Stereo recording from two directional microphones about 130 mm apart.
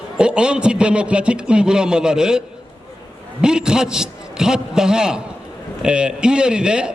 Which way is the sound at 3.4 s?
5° right (ahead or behind).